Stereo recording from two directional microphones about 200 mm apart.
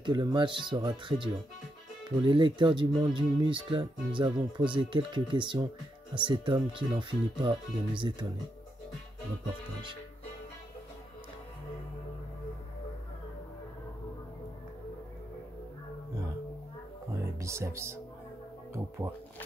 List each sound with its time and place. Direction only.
0.0 s speech: 20° right (ahead or behind)
17.1 s music: 15° right (ahead or behind)
18.7 s speech: 15° right (ahead or behind)